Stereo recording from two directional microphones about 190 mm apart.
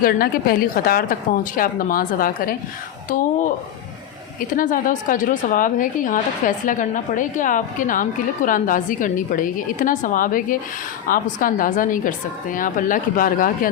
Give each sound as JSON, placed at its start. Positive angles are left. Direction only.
{"t": 0.0, "sound": "a woman's voice", "side_deg": 50}
{"t": 4.4, "sound": "a woman's voice", "side_deg": 45}